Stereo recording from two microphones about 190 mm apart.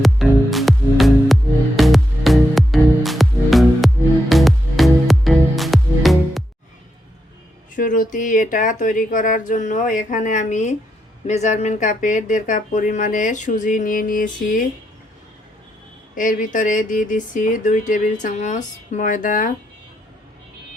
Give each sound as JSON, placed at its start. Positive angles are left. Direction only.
{"t": 0.0, "sound": "music", "side_deg": 0}
{"t": 7.8, "sound": "speech", "side_deg": 45}
{"t": 16.1, "sound": "speech", "side_deg": 45}